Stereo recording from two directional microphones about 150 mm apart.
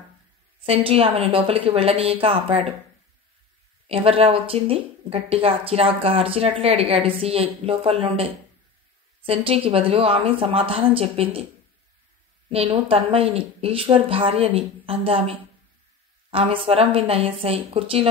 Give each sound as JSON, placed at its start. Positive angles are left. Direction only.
{"t": 0.7, "sound": "a woman's voice", "side_deg": -40}
{"t": 3.8, "sound": "a woman's voice", "side_deg": -40}
{"t": 12.4, "sound": "a woman's voice", "side_deg": -40}